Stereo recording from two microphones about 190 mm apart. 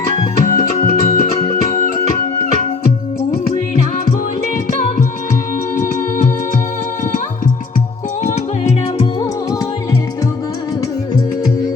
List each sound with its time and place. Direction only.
0.4 s music: 45° left (ahead or behind)
5.9 s music: 45° left (ahead or behind)
8.2 s music: 35° left (ahead or behind)